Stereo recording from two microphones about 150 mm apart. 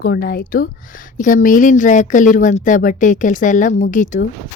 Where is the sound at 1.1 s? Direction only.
60° left (ahead or behind).